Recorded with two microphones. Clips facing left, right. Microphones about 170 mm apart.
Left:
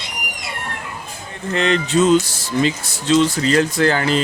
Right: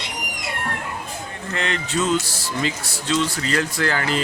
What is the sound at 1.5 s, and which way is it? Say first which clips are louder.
Speech: left 8 dB; 20° left (ahead or behind).